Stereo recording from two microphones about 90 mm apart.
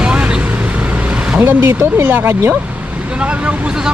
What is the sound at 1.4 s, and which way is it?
Speech, 25° right (ahead or behind).